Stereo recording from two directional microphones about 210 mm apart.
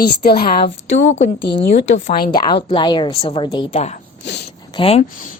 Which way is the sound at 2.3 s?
25° left (ahead or behind).